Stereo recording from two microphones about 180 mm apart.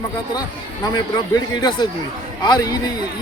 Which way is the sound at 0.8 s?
20° left (ahead or behind).